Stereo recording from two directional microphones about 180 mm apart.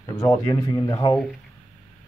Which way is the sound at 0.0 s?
20° left (ahead or behind).